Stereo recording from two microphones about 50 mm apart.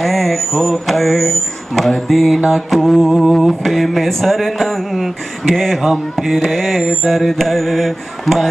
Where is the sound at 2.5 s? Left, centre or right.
Centre.